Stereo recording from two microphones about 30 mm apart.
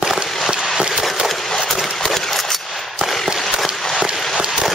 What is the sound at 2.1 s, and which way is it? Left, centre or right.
Coin, centre.